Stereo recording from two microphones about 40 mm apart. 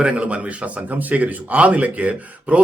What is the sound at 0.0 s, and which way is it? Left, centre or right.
A man's voice, right.